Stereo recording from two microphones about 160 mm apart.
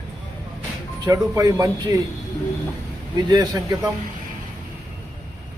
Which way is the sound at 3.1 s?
25° right (ahead or behind).